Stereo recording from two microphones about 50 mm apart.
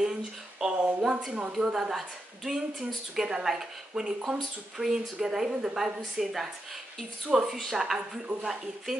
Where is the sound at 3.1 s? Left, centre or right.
Centre.